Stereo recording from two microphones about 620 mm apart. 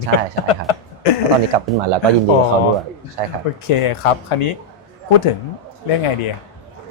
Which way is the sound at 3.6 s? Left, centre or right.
Left.